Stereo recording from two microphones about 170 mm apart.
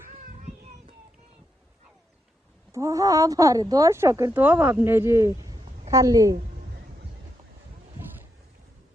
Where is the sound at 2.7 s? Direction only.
20° right (ahead or behind).